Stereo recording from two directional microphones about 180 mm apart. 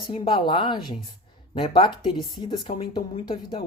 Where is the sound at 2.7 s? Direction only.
40° left (ahead or behind).